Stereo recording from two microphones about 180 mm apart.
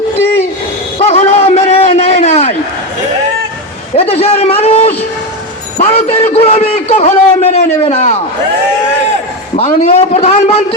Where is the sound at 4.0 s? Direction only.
35° left (ahead or behind).